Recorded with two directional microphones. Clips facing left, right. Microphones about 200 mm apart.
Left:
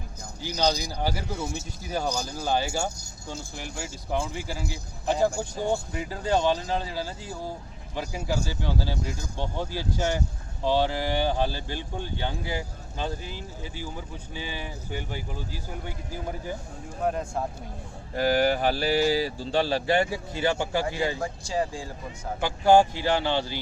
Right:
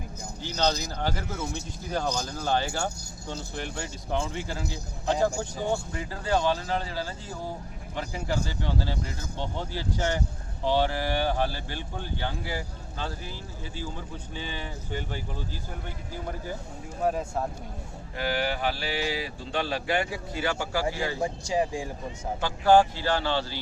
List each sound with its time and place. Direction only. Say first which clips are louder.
0.4 s speech: left 1 dB; 10° left (ahead or behind)
17.0 s speech: even; 5° right (ahead or behind)
18.1 s speech: left 6 dB; 40° left (ahead or behind); by 21.2 s 20° left (ahead or behind)
21.2 s speech: right 2 dB; 20° right (ahead or behind)
22.4 s speech: left 1 dB; 15° left (ahead or behind)